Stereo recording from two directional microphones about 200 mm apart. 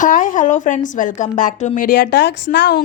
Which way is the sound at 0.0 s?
40° left (ahead or behind).